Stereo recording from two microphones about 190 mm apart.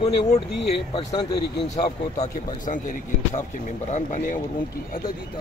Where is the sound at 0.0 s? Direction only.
30° left (ahead or behind).